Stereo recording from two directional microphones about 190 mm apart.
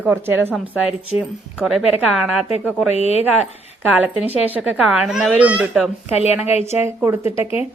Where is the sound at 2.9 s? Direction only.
35° left (ahead or behind).